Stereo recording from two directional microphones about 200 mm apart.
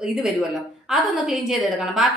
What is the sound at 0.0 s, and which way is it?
A woman's voice, centre (ahead or behind).